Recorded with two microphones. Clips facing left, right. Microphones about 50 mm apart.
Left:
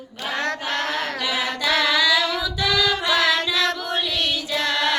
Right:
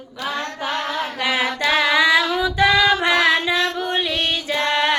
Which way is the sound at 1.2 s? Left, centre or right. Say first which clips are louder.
Right 4 dB; right.